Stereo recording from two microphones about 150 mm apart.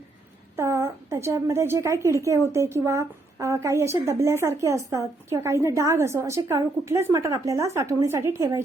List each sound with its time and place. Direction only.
0.5 s a woman's voice: 20° right (ahead or behind)